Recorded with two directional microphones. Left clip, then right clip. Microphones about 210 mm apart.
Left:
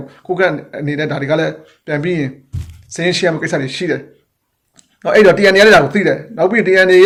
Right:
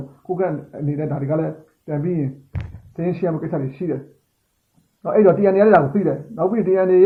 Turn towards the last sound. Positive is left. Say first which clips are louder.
# left 6 dB
turn(degrees=15)  # may be behind; listen again after turning